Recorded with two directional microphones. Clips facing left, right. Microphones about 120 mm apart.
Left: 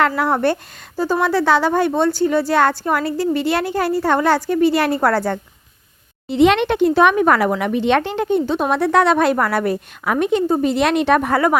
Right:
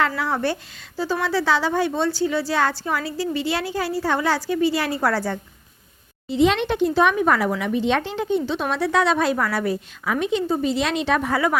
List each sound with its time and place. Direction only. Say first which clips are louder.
0.2 s a woman's voice: left 6 dB; 55° left (ahead or behind)
6.2 s a woman's voice: left 5 dB; 70° left (ahead or behind)